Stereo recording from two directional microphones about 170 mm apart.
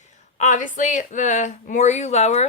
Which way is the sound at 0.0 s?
45° left (ahead or behind).